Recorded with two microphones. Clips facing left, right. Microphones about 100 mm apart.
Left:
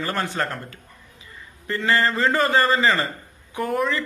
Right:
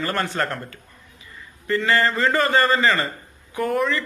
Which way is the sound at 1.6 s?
25° left (ahead or behind).